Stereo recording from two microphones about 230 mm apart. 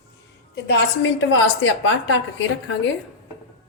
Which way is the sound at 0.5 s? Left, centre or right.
Left.